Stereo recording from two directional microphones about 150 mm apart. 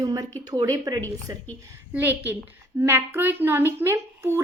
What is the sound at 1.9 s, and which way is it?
A woman's voice, 10° right (ahead or behind).